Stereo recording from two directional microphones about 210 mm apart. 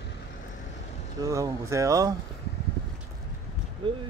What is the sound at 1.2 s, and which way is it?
Speech, 15° right (ahead or behind).